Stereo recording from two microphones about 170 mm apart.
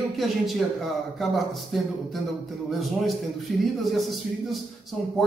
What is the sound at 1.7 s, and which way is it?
A man's voice, centre (ahead or behind).